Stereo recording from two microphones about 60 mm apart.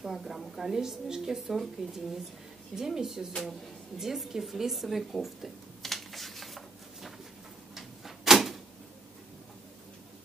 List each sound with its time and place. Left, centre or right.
0.0 s a woman's voice: centre
4.0 s a sound: centre
7.7 s door: centre